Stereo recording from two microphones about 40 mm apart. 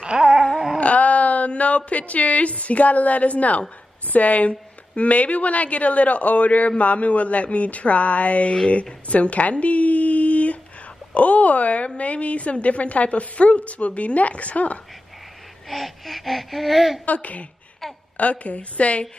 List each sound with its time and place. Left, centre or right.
0.0 s dog: right
0.7 s a woman's voice: left
15.7 s speech: centre
17.0 s a woman's voice: left